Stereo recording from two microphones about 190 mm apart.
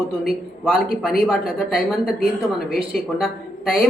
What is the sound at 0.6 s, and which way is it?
A man's voice, centre (ahead or behind).